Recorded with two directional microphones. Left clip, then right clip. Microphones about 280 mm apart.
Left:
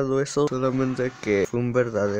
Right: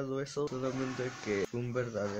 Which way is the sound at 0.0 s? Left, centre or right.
Left.